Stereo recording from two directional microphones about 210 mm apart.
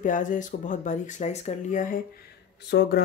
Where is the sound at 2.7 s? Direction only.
50° left (ahead or behind).